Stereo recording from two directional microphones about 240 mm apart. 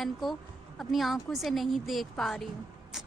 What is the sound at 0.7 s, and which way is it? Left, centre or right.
A woman's voice, centre.